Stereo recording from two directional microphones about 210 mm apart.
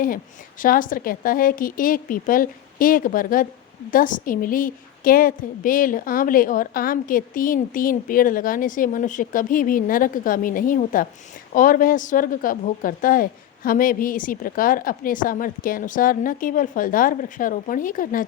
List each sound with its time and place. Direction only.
0.6 s a woman's voice: 40° left (ahead or behind)